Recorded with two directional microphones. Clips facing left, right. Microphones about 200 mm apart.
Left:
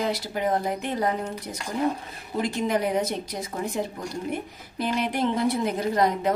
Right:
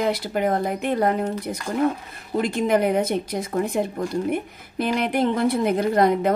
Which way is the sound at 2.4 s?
60° right (ahead or behind).